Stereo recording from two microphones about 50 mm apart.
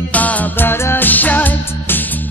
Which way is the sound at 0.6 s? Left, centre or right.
Left.